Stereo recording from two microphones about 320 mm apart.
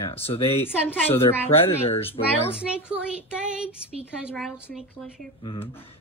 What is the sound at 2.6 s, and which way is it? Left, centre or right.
Speech, centre.